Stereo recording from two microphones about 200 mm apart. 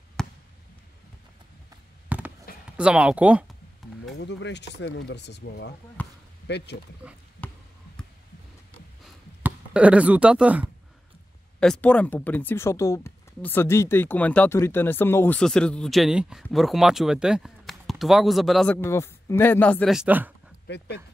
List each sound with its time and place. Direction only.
0.2 s basketball bounce: 5° left (ahead or behind)
2.0 s a sound: 5° right (ahead or behind)
2.8 s speech: 5° right (ahead or behind)
4.2 s speech: 60° left (ahead or behind)
6.0 s basketball bounce: 5° left (ahead or behind)
6.4 s speech: 60° left (ahead or behind)
9.4 s speech: 5° right (ahead or behind)
11.6 s speech: 5° left (ahead or behind)
18.8 s speech: 10° left (ahead or behind); by 20.3 s 10° right (ahead or behind)
20.6 s speech: 60° left (ahead or behind)